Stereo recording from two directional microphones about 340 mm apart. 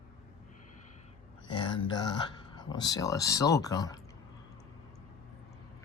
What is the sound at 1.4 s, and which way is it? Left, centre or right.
Speech, centre.